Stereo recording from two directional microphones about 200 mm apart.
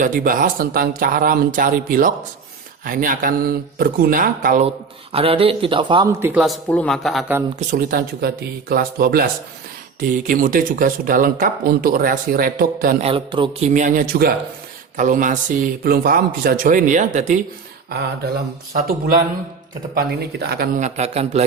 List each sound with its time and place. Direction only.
0.0 s speech: 45° right (ahead or behind)
5.1 s speech: 30° right (ahead or behind)
6.1 s speech: 10° right (ahead or behind)
6.4 s speech: 5° left (ahead or behind)
7.6 s speech: 40° right (ahead or behind)
10.2 s speech: 45° right (ahead or behind)
13.0 s speech: 30° right (ahead or behind)
13.7 s speech: 40° right (ahead or behind)
18.9 s speech: 45° right (ahead or behind)
20.7 s speech: 35° right (ahead or behind)